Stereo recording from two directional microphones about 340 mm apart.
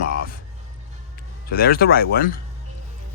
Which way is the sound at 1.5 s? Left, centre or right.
Left.